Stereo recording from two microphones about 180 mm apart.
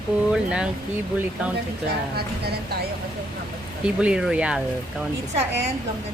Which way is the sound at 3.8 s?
5° right (ahead or behind).